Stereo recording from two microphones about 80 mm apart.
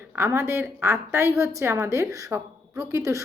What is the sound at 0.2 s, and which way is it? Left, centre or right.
A woman's voice, right.